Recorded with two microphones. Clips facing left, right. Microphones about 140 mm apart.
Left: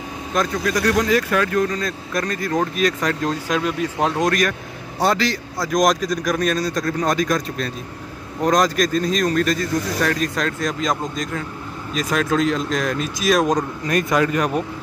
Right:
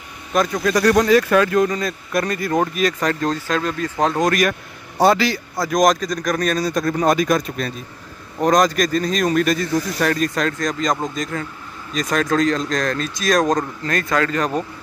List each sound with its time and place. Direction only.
0.3 s speech: 5° right (ahead or behind)
1.1 s speech: 25° right (ahead or behind)
1.7 s a man's voice: 10° right (ahead or behind); by 14.6 s 10° left (ahead or behind)